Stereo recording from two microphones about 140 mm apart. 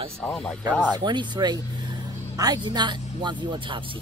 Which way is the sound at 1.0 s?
35° right (ahead or behind).